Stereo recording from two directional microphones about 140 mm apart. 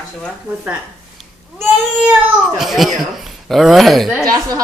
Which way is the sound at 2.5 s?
Centre (ahead or behind).